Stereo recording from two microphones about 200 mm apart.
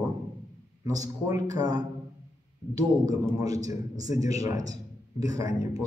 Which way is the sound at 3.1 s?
15° right (ahead or behind).